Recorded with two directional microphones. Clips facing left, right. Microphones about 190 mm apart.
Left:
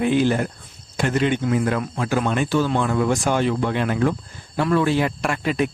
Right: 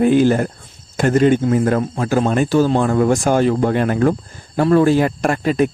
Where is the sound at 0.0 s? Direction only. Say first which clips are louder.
Right 6 dB; 45° right (ahead or behind).